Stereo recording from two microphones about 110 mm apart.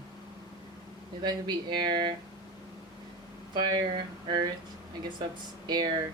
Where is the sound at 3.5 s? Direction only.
45° right (ahead or behind).